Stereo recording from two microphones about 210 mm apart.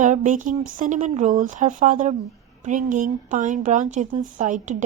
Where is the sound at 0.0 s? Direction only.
35° right (ahead or behind).